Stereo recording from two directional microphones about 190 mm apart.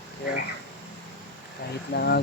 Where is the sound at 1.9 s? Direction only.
60° left (ahead or behind).